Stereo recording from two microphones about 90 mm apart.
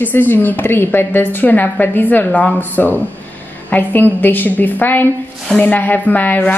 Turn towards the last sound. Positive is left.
turn(degrees=20)  # may be behind; listen again after turning